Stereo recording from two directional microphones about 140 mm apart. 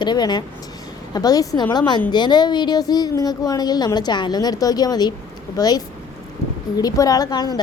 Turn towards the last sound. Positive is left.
turn(degrees=25)  # may be behind; listen again after turning